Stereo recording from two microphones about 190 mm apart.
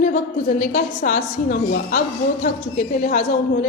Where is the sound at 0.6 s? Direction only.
40° left (ahead or behind).